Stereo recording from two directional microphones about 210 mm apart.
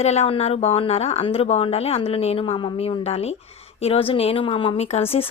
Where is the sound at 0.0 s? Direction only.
30° left (ahead or behind).